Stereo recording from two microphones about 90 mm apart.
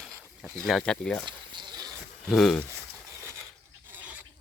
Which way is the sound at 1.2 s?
55° right (ahead or behind).